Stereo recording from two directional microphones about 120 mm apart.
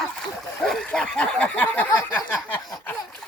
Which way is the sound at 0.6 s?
5° left (ahead or behind).